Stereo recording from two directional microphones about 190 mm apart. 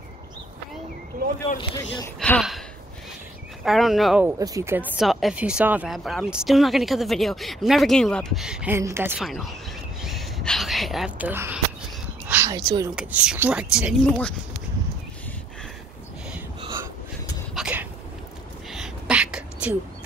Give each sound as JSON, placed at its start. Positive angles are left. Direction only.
{"t": 1.6, "sound": "speech", "side_deg": 25}
{"t": 2.1, "sound": "speech", "side_deg": 5}
{"t": 3.6, "sound": "speech", "side_deg": 0}
{"t": 4.4, "sound": "speech", "side_deg": -15}
{"t": 9.2, "sound": "speech", "side_deg": 0}
{"t": 10.0, "sound": "a sound", "side_deg": 0}
{"t": 12.9, "sound": "speech", "side_deg": -5}
{"t": 17.6, "sound": "dog", "side_deg": -5}
{"t": 18.7, "sound": "a sound", "side_deg": -5}